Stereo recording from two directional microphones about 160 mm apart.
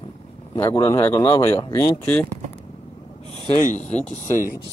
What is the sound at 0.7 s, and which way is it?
Speech, 20° left (ahead or behind).